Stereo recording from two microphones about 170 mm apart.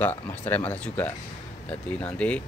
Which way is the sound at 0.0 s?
10° left (ahead or behind).